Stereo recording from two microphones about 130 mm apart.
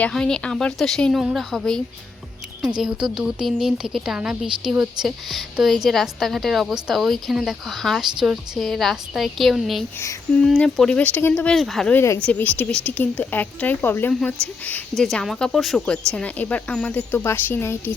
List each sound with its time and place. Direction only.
0.0 s a woman's voice: 5° left (ahead or behind)
11.5 s a woman's voice: centre (ahead or behind)
11.9 s speech: 20° left (ahead or behind)
12.2 s a woman's voice: 10° left (ahead or behind)